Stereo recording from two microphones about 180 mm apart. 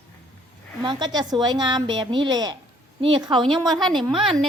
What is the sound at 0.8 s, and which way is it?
A woman's voice, 25° right (ahead or behind).